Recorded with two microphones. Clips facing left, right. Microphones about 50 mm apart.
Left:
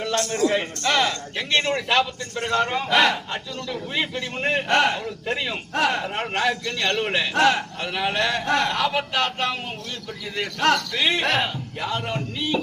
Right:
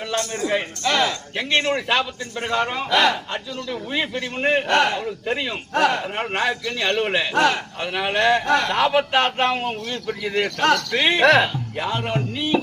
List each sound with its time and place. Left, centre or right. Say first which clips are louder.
0.3 s speech: left 2 dB; centre
1.4 s speech: right 2 dB; right
1.9 s a man's voice: even; centre
2.9 s a man's voice: right 1 dB; centre
3.3 s a man's voice: right 2 dB; centre
4.7 s a man's voice: right 1 dB; centre
7.3 s speech: even; centre
7.8 s a man's voice: right 2 dB; centre
8.4 s speech: right 2 dB; centre
8.7 s speech: right 5 dB; right
10.4 s speech: right 1 dB; centre
10.9 s speech: right 6 dB; right